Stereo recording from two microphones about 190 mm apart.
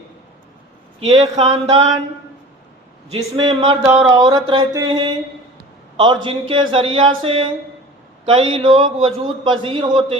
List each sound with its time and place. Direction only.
1.1 s a man's voice: 25° right (ahead or behind)
3.1 s a man's voice: 30° right (ahead or behind)
6.5 s a man's voice: 25° right (ahead or behind)